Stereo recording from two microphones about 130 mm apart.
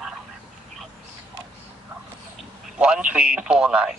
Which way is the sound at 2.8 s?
10° right (ahead or behind).